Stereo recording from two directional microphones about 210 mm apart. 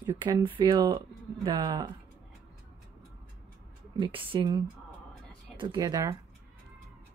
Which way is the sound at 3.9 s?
25° right (ahead or behind).